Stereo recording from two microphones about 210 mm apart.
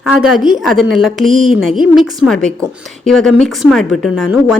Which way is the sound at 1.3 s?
40° right (ahead or behind).